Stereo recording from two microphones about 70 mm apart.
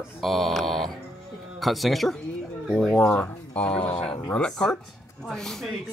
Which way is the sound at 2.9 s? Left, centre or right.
Centre.